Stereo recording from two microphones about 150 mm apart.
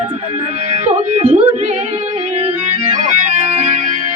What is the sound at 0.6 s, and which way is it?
Music, 45° right (ahead or behind).